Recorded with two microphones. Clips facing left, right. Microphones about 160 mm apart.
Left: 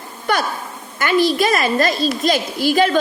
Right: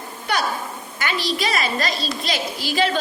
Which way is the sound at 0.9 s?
50° left (ahead or behind).